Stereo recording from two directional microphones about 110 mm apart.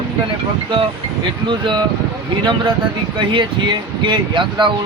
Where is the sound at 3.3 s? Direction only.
45° right (ahead or behind).